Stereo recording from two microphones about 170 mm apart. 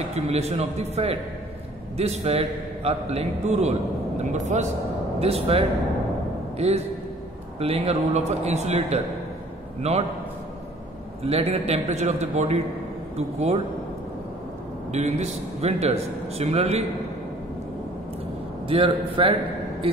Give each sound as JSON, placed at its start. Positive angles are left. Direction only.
{"t": 0.1, "sound": "a man's voice", "side_deg": -40}
{"t": 6.6, "sound": "a man's voice", "side_deg": -35}
{"t": 11.2, "sound": "a man's voice", "side_deg": -35}
{"t": 14.9, "sound": "a man's voice", "side_deg": -40}
{"t": 18.7, "sound": "a man's voice", "side_deg": -30}